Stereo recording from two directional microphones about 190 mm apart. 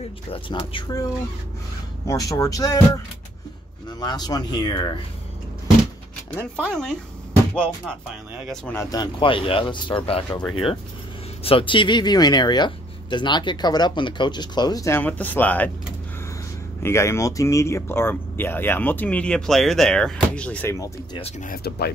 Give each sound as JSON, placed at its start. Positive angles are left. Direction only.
{"t": 0.3, "sound": "speech", "side_deg": 25}
{"t": 2.0, "sound": "speech", "side_deg": 20}
{"t": 4.0, "sound": "speech", "side_deg": 20}
{"t": 6.3, "sound": "speech", "side_deg": 5}
{"t": 8.6, "sound": "speech", "side_deg": 15}
{"t": 11.4, "sound": "speech", "side_deg": 30}
{"t": 16.8, "sound": "speech", "side_deg": 15}
{"t": 21.2, "sound": "speech", "side_deg": 40}
{"t": 21.6, "sound": "speech", "side_deg": 55}